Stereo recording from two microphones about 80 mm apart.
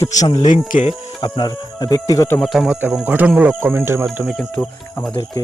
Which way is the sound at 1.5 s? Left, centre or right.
Left.